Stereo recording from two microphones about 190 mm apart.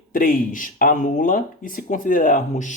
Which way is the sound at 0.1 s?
45° left (ahead or behind).